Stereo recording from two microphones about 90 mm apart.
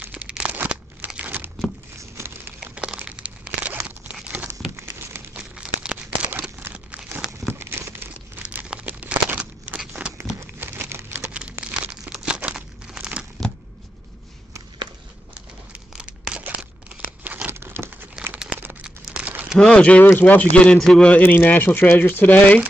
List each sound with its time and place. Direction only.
0.0 s crumpling: 10° right (ahead or behind)
2.0 s a sound: 30° right (ahead or behind)
2.6 s crumpling: 10° right (ahead or behind)
4.7 s crumpling: 30° right (ahead or behind)
5.3 s crumpling: 10° right (ahead or behind); by 8.1 s 25° right (ahead or behind)
8.4 s a sound: 15° right (ahead or behind)
10.4 s crumpling: 25° right (ahead or behind); by 13.3 s 10° right (ahead or behind)
15.9 s crumpling: 10° right (ahead or behind)
19.6 s speech: 15° left (ahead or behind)
21.1 s speech: 20° left (ahead or behind)